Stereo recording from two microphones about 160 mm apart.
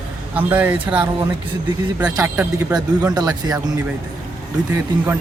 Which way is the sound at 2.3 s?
10° right (ahead or behind).